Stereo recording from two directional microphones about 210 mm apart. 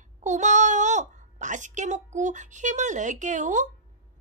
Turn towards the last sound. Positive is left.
turn(degrees=-35)  # may be behind; listen again after turning